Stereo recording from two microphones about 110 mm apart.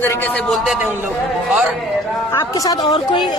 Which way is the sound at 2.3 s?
30° left (ahead or behind).